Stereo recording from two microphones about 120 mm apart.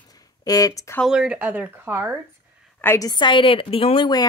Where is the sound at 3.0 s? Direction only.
35° left (ahead or behind).